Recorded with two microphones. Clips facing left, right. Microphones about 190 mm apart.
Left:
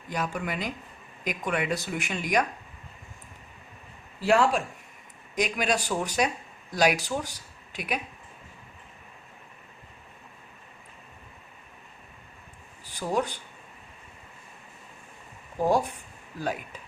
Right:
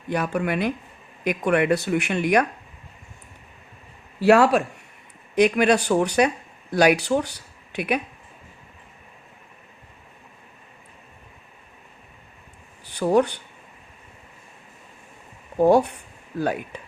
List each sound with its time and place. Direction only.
0.1 s speech: 60° right (ahead or behind)
4.2 s speech: 70° right (ahead or behind)
12.8 s speech: 65° right (ahead or behind)
15.5 s speech: 65° right (ahead or behind)